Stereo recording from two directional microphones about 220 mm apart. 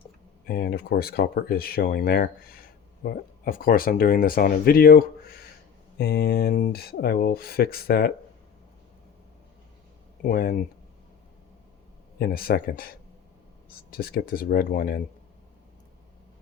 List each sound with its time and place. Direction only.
0.4 s speech: 45° left (ahead or behind)
10.2 s speech: 40° left (ahead or behind)
12.2 s speech: 45° left (ahead or behind)